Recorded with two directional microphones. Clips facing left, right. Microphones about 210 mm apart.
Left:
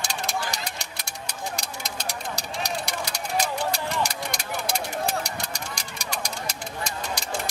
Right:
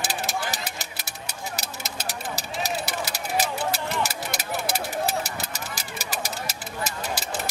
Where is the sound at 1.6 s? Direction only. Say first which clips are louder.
Even; 5° right (ahead or behind).